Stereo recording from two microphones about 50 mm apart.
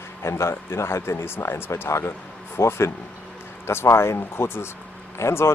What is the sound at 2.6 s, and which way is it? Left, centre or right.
Speech, left.